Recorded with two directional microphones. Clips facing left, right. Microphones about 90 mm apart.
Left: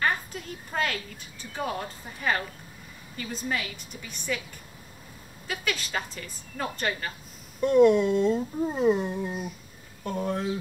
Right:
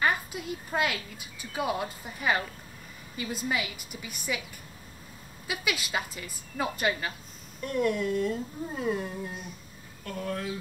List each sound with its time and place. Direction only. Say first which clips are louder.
0.0 s a woman's voice: even; 10° right (ahead or behind)
5.5 s a woman's voice: even; 10° right (ahead or behind)
7.6 s speech: left 9 dB; 20° left (ahead or behind)